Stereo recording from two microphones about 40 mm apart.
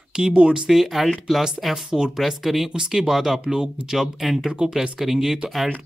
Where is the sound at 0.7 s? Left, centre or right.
Centre.